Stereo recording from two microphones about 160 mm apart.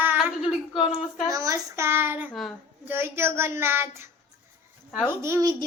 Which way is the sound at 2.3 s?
Centre (ahead or behind).